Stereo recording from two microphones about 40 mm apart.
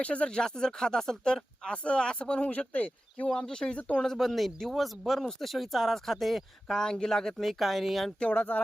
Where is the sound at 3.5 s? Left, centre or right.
Centre.